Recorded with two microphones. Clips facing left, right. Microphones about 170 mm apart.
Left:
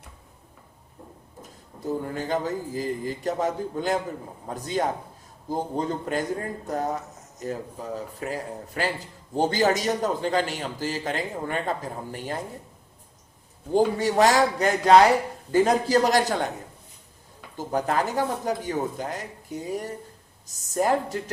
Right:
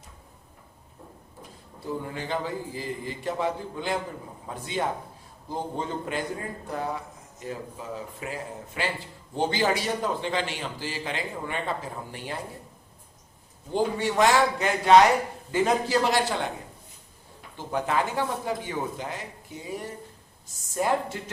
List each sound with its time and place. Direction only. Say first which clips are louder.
1.4 s a man's voice: left 4 dB; 45° left (ahead or behind)
13.7 s speech: left 4 dB; 40° left (ahead or behind)
17.6 s speech: left 2 dB; 40° left (ahead or behind)